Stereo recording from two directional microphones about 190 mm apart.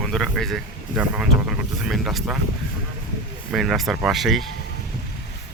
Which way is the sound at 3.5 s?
Centre (ahead or behind).